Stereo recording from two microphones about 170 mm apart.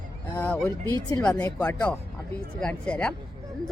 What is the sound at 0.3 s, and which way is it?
A woman's voice, 10° left (ahead or behind).